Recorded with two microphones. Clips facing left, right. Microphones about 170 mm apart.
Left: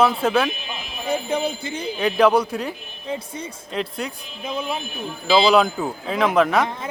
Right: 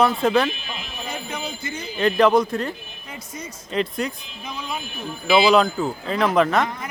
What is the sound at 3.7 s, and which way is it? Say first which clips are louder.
Speech: right 3 dB; centre (ahead or behind).